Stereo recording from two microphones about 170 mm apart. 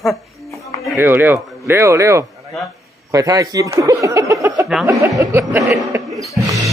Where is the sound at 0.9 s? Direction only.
10° right (ahead or behind).